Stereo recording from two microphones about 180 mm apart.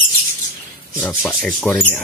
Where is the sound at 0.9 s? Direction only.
15° left (ahead or behind).